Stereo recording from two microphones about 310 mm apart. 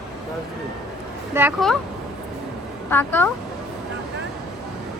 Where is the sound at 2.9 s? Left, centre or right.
Centre.